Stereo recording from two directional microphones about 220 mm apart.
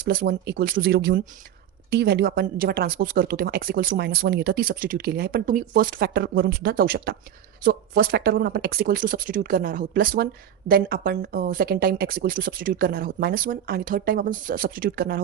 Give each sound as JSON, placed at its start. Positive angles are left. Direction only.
{"t": 0.0, "sound": "a woman's voice", "side_deg": -45}